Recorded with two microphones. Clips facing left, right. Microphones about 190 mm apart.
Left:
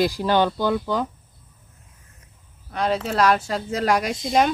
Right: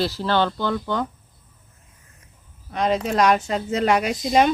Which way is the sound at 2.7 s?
10° right (ahead or behind).